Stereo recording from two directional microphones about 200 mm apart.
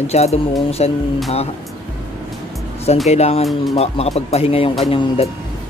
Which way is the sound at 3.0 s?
30° left (ahead or behind).